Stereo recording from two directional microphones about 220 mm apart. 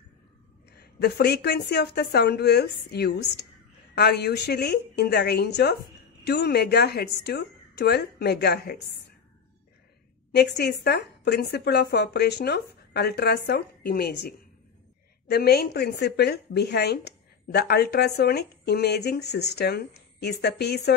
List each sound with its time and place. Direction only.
0.7 s a woman's voice: 50° left (ahead or behind)
10.3 s a woman's voice: 50° left (ahead or behind)